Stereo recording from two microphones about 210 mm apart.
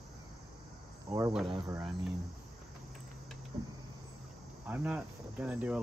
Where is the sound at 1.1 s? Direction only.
30° right (ahead or behind).